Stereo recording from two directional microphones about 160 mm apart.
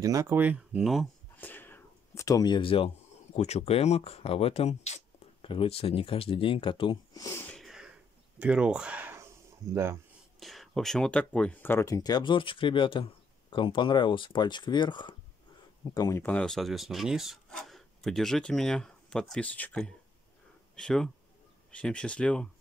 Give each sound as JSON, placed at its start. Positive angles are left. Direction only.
{"t": 0.0, "sound": "speech", "side_deg": -20}
{"t": 1.4, "sound": "a sound", "side_deg": 10}
{"t": 3.3, "sound": "speech", "side_deg": 40}
{"t": 7.2, "sound": "wheeze", "side_deg": 15}
{"t": 7.5, "sound": "a sound", "side_deg": 0}
{"t": 10.4, "sound": "speech", "side_deg": 0}